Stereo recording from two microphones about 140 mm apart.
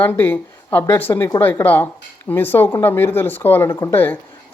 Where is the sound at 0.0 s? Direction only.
15° left (ahead or behind).